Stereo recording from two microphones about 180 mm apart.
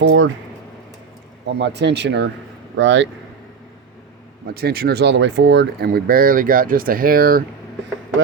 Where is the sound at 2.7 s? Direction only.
90° right.